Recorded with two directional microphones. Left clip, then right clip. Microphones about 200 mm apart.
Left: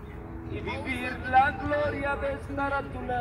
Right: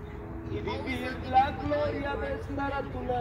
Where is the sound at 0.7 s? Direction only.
20° left (ahead or behind).